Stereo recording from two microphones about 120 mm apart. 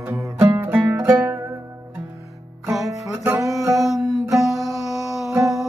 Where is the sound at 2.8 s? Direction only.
20° right (ahead or behind).